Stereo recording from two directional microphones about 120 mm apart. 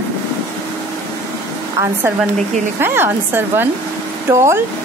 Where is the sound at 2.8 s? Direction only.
20° right (ahead or behind).